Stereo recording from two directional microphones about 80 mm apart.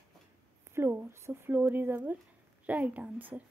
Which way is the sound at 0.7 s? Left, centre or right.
Right.